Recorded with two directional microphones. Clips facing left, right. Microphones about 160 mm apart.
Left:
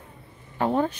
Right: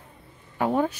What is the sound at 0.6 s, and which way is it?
Speech, 10° right (ahead or behind).